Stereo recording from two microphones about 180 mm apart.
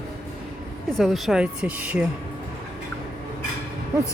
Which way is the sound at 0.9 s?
Centre (ahead or behind).